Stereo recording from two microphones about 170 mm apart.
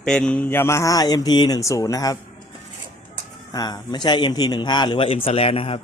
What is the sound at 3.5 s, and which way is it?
A man's voice, 20° left (ahead or behind).